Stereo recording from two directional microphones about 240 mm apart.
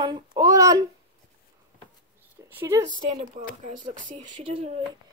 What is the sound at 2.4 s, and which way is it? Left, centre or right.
Speech, centre.